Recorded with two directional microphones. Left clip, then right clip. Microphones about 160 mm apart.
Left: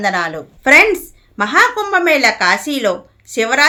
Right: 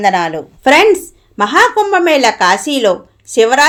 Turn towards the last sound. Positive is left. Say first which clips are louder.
# right 5 dB
turn(degrees=-15)  # may be behind; listen again after turning